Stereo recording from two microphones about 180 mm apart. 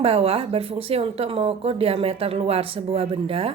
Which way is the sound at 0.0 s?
35° right (ahead or behind).